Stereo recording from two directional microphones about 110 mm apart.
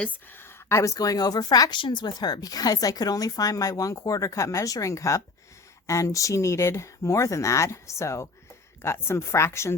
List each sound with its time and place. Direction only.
0.0 s a woman's voice: 15° left (ahead or behind)